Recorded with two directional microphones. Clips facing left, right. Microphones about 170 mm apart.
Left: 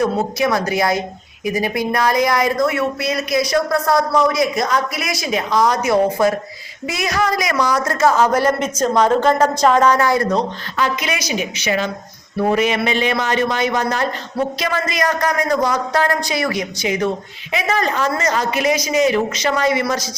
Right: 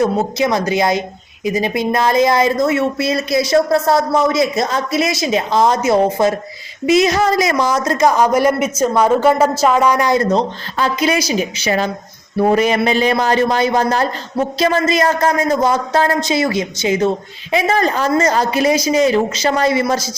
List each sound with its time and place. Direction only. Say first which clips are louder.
0.0 s a man's voice: right 2 dB; 20° right (ahead or behind)